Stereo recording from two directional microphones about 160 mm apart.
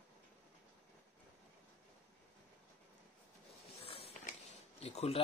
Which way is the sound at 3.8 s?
35° left (ahead or behind).